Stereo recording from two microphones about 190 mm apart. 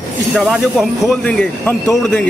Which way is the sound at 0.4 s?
Centre (ahead or behind).